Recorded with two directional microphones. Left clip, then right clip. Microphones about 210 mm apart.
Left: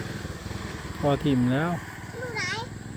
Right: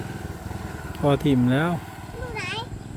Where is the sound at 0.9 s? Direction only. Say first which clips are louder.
Right 3 dB; 20° right (ahead or behind).